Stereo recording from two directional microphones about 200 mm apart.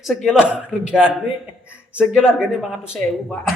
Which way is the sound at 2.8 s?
10° left (ahead or behind).